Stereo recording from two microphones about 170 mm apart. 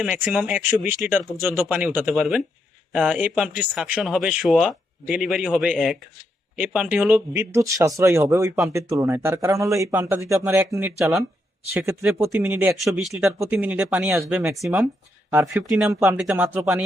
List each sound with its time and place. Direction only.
0.0 s speech: 5° right (ahead or behind)